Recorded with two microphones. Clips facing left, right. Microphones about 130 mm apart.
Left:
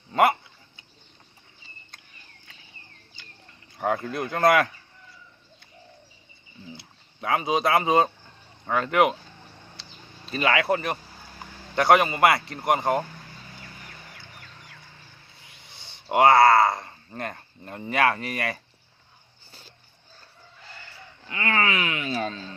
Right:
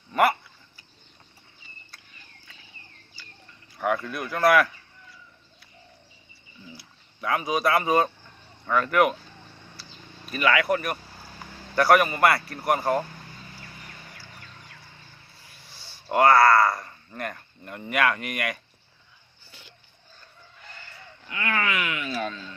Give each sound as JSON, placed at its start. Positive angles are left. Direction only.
{"t": 0.1, "sound": "speech", "side_deg": 25}
{"t": 3.8, "sound": "speech", "side_deg": 25}
{"t": 6.7, "sound": "speech", "side_deg": 25}
{"t": 10.2, "sound": "speech", "side_deg": 30}
{"t": 15.4, "sound": "a sound", "side_deg": 20}
{"t": 17.2, "sound": "speech", "side_deg": 30}
{"t": 19.5, "sound": "a sound", "side_deg": 35}
{"t": 21.2, "sound": "speech", "side_deg": 35}